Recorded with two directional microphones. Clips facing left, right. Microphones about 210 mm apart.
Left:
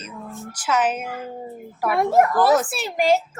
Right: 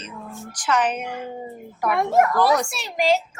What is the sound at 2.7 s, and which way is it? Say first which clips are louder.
Speech: left 2 dB; 55° left (ahead or behind).